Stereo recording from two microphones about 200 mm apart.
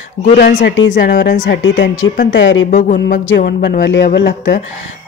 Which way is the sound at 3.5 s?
55° left (ahead or behind).